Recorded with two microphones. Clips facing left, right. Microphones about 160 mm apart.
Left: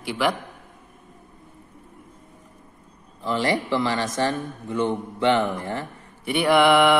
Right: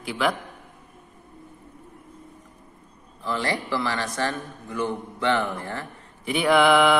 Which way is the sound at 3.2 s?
20° left (ahead or behind).